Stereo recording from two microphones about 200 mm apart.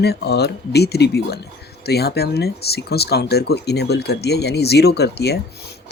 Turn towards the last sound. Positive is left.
turn(degrees=55)  # may be behind; listen again after turning